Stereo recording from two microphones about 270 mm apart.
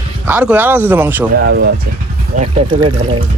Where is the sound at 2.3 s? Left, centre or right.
Centre.